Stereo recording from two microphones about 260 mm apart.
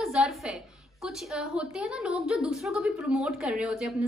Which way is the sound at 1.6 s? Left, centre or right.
Centre.